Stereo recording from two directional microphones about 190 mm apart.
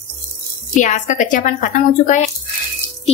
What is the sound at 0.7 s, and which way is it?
A woman's voice, 40° left (ahead or behind).